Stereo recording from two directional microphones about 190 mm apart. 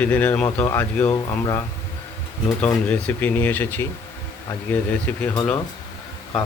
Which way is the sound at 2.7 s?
10° left (ahead or behind).